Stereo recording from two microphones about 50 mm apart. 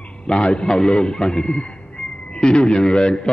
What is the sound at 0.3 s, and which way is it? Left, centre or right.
A man's voice, centre.